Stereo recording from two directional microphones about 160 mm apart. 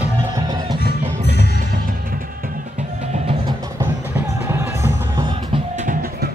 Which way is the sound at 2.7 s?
45° right (ahead or behind).